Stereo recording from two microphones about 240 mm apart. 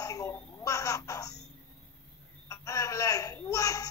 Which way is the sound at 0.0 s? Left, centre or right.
Centre.